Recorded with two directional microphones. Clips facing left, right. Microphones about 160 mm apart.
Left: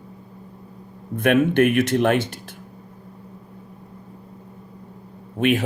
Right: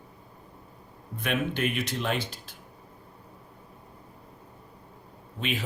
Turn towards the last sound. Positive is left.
turn(degrees=55)  # may be behind; listen again after turning